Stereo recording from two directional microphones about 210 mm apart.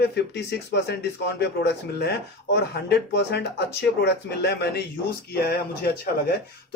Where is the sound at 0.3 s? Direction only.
50° left (ahead or behind).